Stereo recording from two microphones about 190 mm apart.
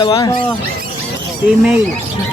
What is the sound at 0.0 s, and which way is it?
Speech, 20° left (ahead or behind).